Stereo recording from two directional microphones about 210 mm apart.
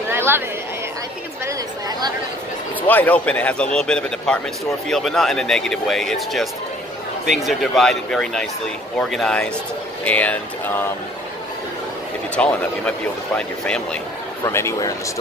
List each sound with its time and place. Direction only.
0.1 s a sound: 10° right (ahead or behind)
1.4 s a woman's voice: 20° right (ahead or behind)
2.9 s speech: 10° left (ahead or behind)
12.4 s speech: 5° left (ahead or behind)
14.4 s speech: 15° left (ahead or behind)